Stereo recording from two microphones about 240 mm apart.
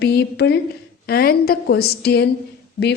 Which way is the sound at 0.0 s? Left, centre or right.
Left.